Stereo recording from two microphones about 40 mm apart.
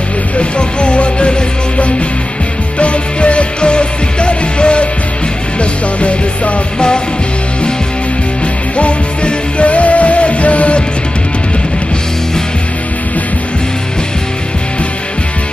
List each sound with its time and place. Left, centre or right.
0.4 s music: left
2.8 s music: left
8.7 s music: left